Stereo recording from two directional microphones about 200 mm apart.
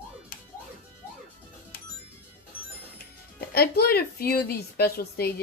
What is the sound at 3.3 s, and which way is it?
A woman's voice, 50° left (ahead or behind).